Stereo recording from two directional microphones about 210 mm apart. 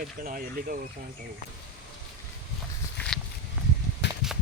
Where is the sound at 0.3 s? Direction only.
40° right (ahead or behind).